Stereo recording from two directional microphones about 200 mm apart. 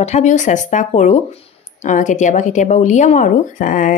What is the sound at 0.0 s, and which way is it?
Speech, 35° left (ahead or behind).